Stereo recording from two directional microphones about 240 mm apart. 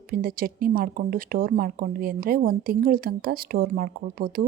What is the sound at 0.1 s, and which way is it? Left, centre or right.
Speech, right.